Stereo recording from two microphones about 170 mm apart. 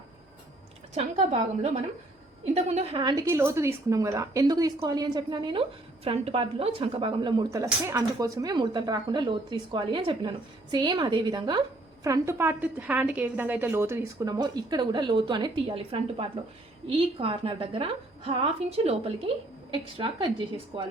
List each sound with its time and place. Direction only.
0.9 s a woman's voice: 40° right (ahead or behind)
20.7 s a woman's voice: 30° right (ahead or behind)